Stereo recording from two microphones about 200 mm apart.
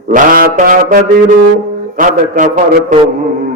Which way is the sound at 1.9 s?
40° right (ahead or behind).